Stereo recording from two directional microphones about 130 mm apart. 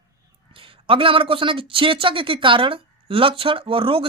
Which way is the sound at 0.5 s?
45° right (ahead or behind).